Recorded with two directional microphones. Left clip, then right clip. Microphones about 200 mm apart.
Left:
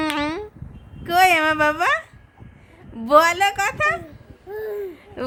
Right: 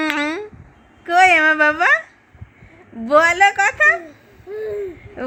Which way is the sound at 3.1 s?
15° left (ahead or behind).